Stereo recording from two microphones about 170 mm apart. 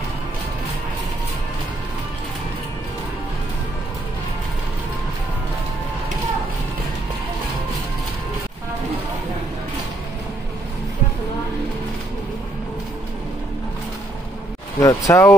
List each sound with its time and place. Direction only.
14.8 s speech: 20° left (ahead or behind)